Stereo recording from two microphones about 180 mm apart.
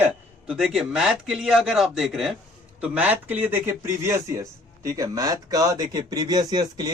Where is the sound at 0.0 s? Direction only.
5° right (ahead or behind).